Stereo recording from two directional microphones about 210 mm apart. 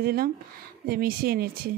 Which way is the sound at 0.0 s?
45° right (ahead or behind).